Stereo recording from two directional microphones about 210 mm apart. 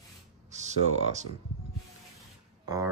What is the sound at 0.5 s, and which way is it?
Speech, 35° right (ahead or behind).